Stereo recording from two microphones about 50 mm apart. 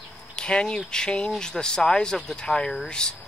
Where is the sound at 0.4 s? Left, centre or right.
Centre.